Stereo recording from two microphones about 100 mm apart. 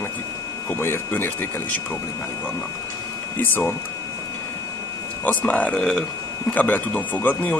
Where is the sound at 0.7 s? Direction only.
25° left (ahead or behind).